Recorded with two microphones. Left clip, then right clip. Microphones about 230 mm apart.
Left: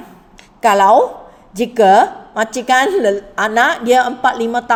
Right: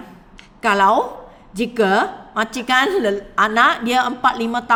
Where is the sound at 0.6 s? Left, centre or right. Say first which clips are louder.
Left 5 dB; centre.